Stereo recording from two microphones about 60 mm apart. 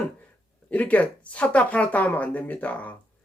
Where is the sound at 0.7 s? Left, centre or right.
Left.